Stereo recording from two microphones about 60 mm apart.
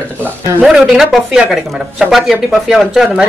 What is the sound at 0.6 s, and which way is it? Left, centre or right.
Speech, centre.